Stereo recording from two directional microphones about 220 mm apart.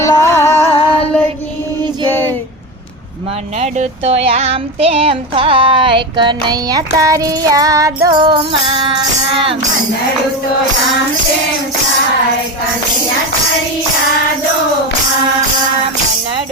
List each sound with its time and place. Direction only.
0.0 s music: 15° left (ahead or behind)
2.0 s a sound: 10° left (ahead or behind)
3.6 s child singing: 30° right (ahead or behind)